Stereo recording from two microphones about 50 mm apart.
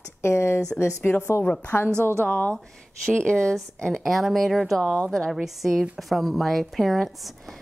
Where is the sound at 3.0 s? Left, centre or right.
Centre.